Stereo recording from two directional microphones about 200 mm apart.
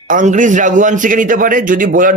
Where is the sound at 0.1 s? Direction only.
40° right (ahead or behind).